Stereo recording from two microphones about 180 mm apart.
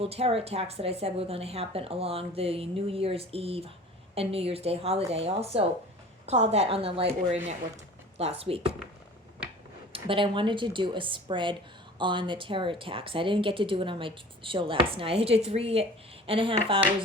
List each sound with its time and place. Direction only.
0.0 s a woman's voice: 35° right (ahead or behind)
8.2 s a woman's voice: 35° right (ahead or behind)
9.9 s a woman's voice: 30° right (ahead or behind)